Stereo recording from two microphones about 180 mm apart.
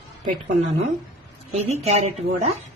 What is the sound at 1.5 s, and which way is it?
Speech, 35° right (ahead or behind).